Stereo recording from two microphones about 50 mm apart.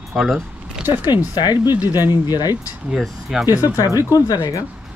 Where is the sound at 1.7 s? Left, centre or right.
Right.